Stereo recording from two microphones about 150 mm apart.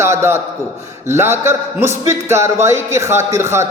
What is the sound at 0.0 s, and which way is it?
A man's voice, 15° right (ahead or behind).